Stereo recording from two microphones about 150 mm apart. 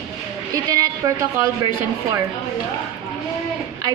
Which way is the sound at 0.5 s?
25° right (ahead or behind).